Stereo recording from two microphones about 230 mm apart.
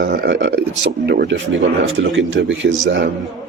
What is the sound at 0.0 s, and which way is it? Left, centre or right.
A man's voice, right.